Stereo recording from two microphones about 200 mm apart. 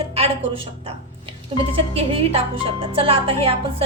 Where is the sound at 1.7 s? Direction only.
30° right (ahead or behind).